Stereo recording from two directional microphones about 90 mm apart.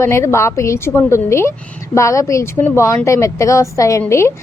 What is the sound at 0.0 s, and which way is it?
Speech, 30° left (ahead or behind).